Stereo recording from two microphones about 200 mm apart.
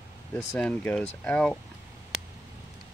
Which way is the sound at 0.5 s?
5° left (ahead or behind).